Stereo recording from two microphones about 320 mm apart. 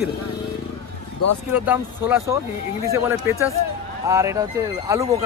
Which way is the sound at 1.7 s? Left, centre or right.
Centre.